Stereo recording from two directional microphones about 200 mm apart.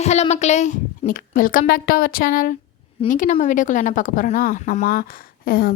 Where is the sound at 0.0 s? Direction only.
35° left (ahead or behind).